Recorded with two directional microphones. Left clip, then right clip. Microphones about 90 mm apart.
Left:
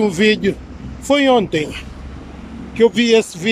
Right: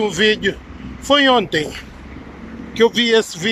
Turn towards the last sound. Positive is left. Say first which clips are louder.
# left 1 dB
turn(degrees=35)  # may be behind; listen again after turning